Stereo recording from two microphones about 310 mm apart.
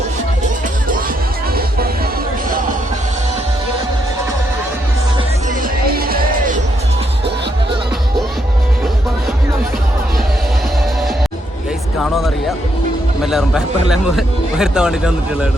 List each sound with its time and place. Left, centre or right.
5.8 s music: right
13.2 s speech: centre